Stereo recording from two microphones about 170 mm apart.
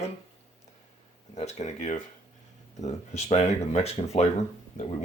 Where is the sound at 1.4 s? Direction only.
40° left (ahead or behind).